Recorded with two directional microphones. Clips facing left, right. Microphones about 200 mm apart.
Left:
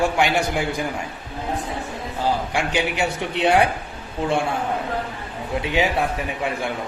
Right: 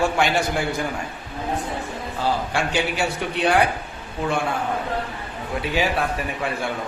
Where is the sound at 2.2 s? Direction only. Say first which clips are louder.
Left 1 dB; 15° left (ahead or behind).